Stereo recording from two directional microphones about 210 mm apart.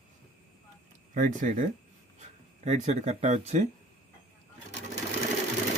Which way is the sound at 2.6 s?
35° right (ahead or behind).